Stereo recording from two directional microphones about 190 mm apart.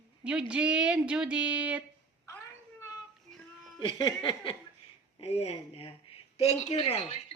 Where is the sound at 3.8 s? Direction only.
25° left (ahead or behind).